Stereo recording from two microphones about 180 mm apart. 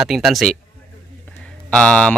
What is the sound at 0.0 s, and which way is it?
Speech, centre (ahead or behind).